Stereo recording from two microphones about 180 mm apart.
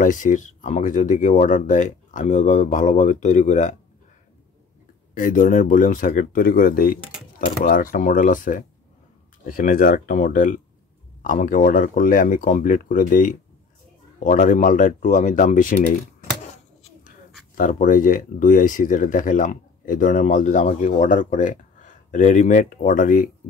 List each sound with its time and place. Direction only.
0.0 s speech: 45° left (ahead or behind)
5.1 s speech: 45° left (ahead or behind)
17.6 s speech: 45° left (ahead or behind)